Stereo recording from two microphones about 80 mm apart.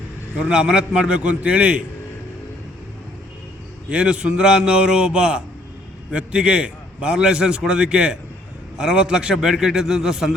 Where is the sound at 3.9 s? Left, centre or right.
Centre.